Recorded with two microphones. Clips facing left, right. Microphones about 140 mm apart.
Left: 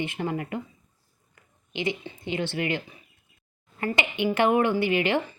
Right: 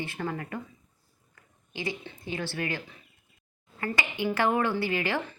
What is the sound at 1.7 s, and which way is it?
Speech, 20° left (ahead or behind).